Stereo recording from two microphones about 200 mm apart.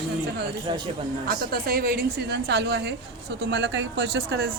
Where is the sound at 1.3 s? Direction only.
45° right (ahead or behind).